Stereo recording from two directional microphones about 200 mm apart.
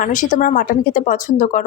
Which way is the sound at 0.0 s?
40° left (ahead or behind).